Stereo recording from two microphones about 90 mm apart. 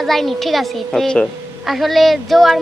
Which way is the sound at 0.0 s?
5° left (ahead or behind).